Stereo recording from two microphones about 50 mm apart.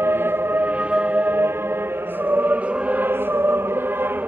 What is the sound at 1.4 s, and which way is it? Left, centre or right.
Music, right.